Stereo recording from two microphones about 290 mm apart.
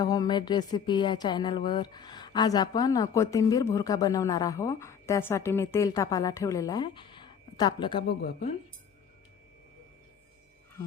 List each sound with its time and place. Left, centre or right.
0.0 s speech: centre